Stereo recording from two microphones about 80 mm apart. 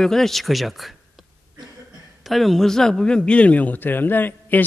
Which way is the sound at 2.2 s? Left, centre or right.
Centre.